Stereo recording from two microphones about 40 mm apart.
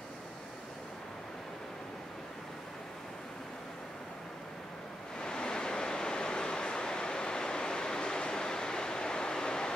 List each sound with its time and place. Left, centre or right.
5.2 s waves: centre